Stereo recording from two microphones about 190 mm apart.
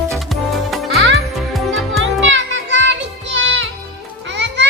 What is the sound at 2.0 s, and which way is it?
Music, 80° right.